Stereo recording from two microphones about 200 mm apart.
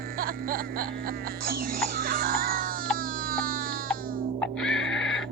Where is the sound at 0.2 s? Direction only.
45° right (ahead or behind).